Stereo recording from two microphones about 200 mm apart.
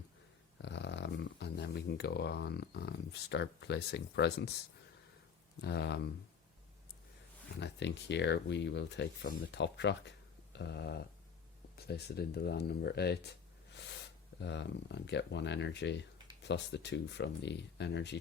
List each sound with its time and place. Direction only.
0.6 s speech: 60° left (ahead or behind)
5.6 s speech: 55° left (ahead or behind)
7.6 s speech: 60° left (ahead or behind)
14.4 s speech: 60° left (ahead or behind)